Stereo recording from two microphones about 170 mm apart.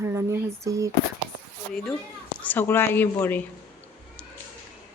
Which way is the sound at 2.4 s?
10° left (ahead or behind).